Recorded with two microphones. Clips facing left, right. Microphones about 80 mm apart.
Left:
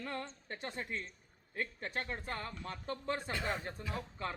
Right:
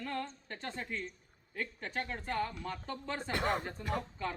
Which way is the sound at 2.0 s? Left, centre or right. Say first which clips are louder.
Right 5 dB; left.